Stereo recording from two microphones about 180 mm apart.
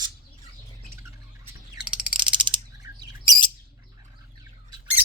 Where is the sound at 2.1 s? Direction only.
25° right (ahead or behind).